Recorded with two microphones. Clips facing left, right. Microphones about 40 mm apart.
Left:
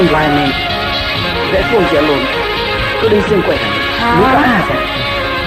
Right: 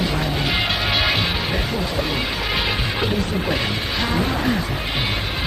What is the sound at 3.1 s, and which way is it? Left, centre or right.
Speech, left.